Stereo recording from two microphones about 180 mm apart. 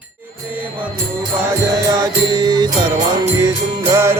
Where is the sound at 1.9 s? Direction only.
20° right (ahead or behind).